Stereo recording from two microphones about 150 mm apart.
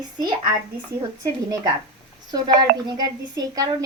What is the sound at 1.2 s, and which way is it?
A woman's voice, 25° right (ahead or behind).